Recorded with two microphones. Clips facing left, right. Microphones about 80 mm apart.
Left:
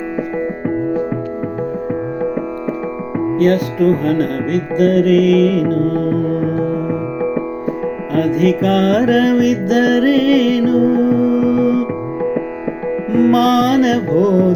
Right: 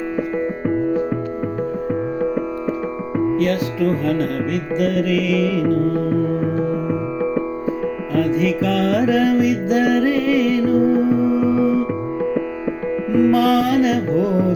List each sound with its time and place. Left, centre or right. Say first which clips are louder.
3.3 s music: left 5 dB; left
6.8 s music: left 2 dB; centre
8.1 s music: left 4 dB; left
13.1 s music: left 3 dB; left